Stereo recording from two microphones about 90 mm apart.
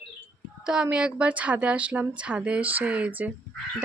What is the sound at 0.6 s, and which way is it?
A woman's voice, 10° right (ahead or behind).